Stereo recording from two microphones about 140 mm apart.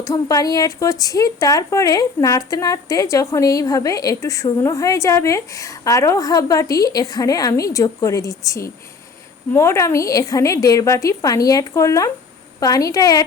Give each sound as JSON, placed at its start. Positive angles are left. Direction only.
{"t": 0.0, "sound": "speech", "side_deg": 25}